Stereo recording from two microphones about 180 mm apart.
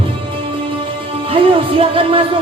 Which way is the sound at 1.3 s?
30° right (ahead or behind).